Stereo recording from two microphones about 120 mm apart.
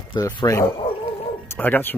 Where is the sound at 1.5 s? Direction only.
15° left (ahead or behind).